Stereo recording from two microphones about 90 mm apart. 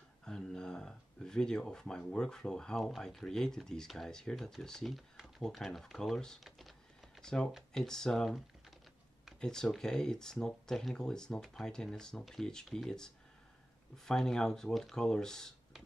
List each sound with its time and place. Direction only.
0.2 s speech: 5° left (ahead or behind)